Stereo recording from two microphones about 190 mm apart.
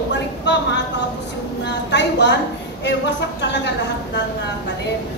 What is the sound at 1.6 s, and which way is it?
Speech, 65° left (ahead or behind).